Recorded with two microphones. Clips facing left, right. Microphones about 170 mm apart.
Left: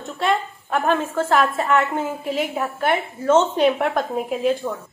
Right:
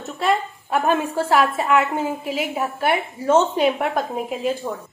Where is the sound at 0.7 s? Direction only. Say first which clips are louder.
Even; 15° right (ahead or behind).